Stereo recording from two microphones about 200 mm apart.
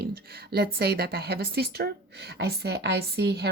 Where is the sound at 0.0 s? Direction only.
50° right (ahead or behind).